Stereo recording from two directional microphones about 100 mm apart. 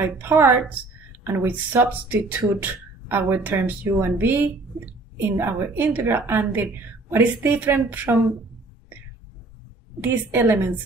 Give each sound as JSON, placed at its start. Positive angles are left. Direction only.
{"t": 0.0, "sound": "speech", "side_deg": -20}
{"t": 9.9, "sound": "speech", "side_deg": -20}